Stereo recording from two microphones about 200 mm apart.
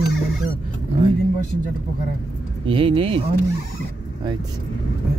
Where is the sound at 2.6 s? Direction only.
25° right (ahead or behind).